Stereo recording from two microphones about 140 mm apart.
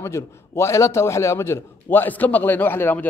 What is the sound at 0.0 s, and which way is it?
A man's voice, 20° left (ahead or behind).